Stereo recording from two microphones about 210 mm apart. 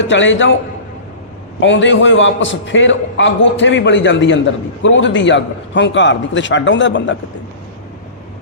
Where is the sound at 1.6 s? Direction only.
60° left (ahead or behind).